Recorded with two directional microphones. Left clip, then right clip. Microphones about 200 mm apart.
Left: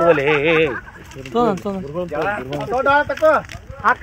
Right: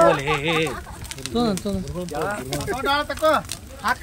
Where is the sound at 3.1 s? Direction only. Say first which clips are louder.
Left 5 dB; 30° left (ahead or behind).